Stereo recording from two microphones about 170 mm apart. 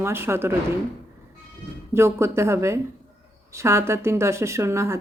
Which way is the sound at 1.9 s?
15° right (ahead or behind).